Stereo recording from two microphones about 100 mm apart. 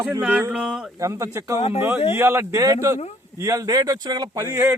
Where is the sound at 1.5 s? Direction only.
90° left.